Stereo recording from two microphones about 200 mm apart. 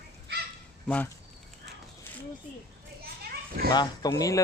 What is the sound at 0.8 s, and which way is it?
Speech, 5° left (ahead or behind).